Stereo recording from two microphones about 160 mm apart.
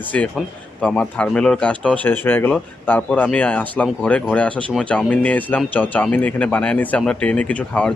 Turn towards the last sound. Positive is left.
turn(degrees=10)  # may be behind; listen again after turning